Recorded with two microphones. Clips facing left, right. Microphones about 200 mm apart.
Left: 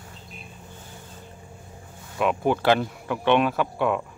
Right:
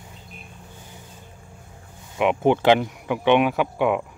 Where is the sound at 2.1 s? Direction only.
20° right (ahead or behind).